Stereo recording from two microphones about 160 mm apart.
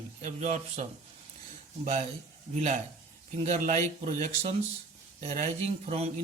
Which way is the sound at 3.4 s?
40° right (ahead or behind).